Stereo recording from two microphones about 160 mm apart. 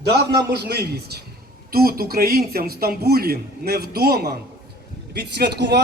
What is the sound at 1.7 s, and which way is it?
A man's voice, 70° right (ahead or behind).